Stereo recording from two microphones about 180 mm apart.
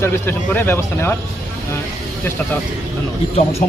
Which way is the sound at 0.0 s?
10° left (ahead or behind).